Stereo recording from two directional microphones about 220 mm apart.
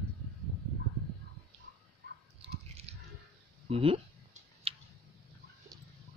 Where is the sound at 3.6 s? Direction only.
25° right (ahead or behind).